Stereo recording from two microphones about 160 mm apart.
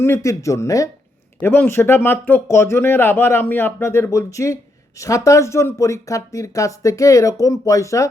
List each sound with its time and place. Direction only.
0.0 s speech: 15° left (ahead or behind)